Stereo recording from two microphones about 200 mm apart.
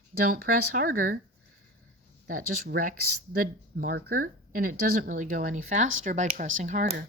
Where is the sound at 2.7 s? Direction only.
45° right (ahead or behind).